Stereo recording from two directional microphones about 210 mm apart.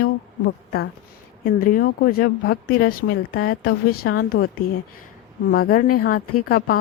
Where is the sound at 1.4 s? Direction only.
45° left (ahead or behind).